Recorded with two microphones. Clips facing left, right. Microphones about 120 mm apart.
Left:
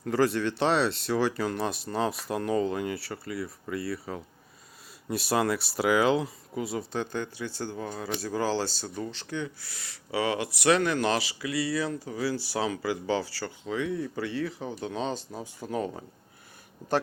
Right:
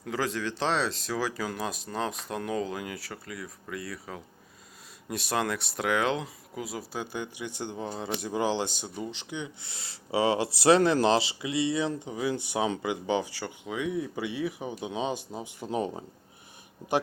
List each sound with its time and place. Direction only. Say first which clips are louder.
0.0 s speech: left 6 dB; centre (ahead or behind); by 16.0 s 15° right (ahead or behind)